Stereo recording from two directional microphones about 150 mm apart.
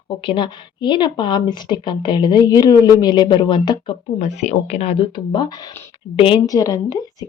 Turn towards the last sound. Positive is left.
turn(degrees=25)  # may be behind; listen again after turning